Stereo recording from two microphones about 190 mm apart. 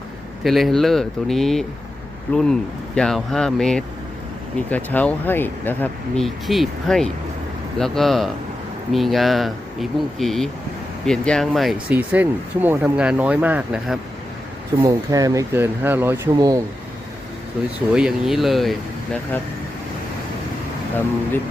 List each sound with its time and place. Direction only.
0.4 s speech: centre (ahead or behind)
14.8 s speech: 20° right (ahead or behind)
17.6 s speech: 5° right (ahead or behind)